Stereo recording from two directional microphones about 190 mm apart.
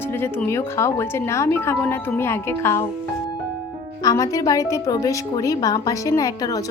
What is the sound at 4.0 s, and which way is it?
Speech, 20° left (ahead or behind).